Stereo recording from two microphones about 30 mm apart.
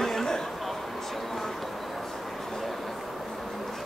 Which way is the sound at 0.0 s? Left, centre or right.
Centre.